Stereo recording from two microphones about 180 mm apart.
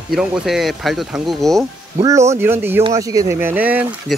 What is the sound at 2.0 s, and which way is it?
Speech, 15° right (ahead or behind).